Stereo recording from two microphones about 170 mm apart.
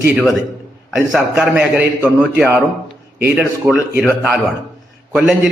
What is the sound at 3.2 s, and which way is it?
Speech, 5° right (ahead or behind).